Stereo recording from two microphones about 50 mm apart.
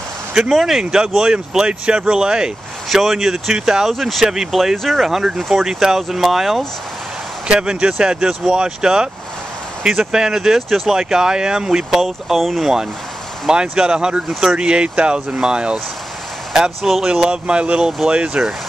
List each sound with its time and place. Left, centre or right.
0.4 s speech: centre
2.9 s speech: centre
3.9 s speech: centre
7.4 s speech: centre
12.4 s speech: centre
13.5 s speech: centre
16.5 s speech: centre
17.1 s speech: centre